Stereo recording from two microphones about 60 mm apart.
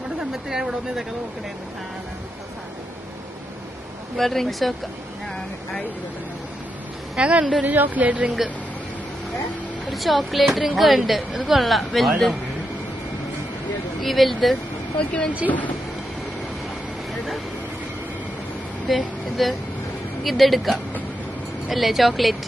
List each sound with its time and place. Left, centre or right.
0.2 s speech: centre
4.2 s speech: centre
7.2 s speech: centre
7.6 s speech: right
9.8 s speech: centre
13.9 s speech: centre
15.0 s speech: centre
18.9 s speech: centre